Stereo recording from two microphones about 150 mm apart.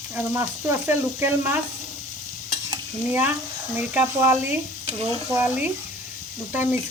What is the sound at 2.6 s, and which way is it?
Stir, 15° right (ahead or behind).